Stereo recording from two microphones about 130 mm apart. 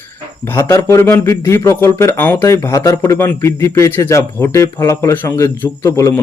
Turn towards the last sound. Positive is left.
turn(degrees=20)  # may be behind; listen again after turning